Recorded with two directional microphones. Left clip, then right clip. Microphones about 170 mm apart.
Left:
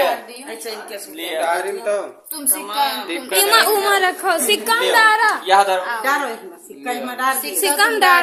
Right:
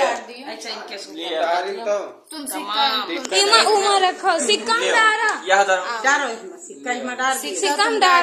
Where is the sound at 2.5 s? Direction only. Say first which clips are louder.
Left 1 dB; 45° right (ahead or behind).